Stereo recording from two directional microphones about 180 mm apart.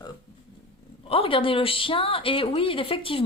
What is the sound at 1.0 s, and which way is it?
Speech, 30° left (ahead or behind).